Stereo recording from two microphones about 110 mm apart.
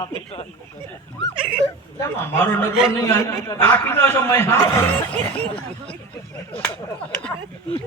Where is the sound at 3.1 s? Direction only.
20° left (ahead or behind).